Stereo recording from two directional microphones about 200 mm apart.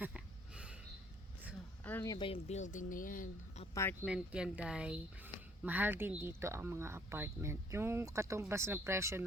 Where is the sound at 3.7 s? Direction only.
10° left (ahead or behind).